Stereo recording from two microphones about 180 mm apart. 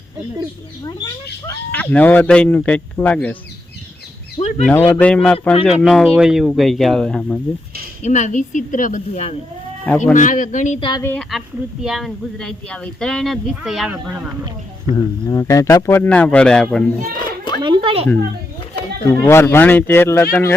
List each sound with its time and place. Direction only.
0.9 s speech: 25° left (ahead or behind)
1.7 s speech: 10° left (ahead or behind)
4.4 s bird: 35° left (ahead or behind)
4.9 s speech: 10° left (ahead or behind)
8.0 s a man's voice: 40° left (ahead or behind)
10.8 s speech: 25° left (ahead or behind)
11.0 s speech: 5° left (ahead or behind)
14.9 s speech: 20° left (ahead or behind)
17.2 s a sound: 25° left (ahead or behind)
17.6 s a sound: 25° right (ahead or behind)
19.0 s speech: 15° left (ahead or behind)